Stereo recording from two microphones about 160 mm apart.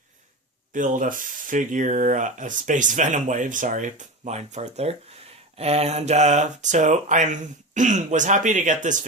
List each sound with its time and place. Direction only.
0.7 s speech: 55° right (ahead or behind)